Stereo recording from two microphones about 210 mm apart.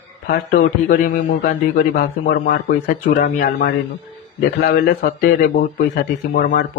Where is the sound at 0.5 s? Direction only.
40° left (ahead or behind).